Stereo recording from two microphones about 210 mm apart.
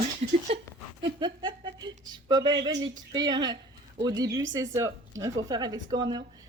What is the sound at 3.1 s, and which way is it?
Speech, 20° right (ahead or behind).